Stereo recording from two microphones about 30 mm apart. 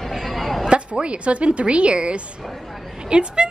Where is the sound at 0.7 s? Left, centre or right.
Right.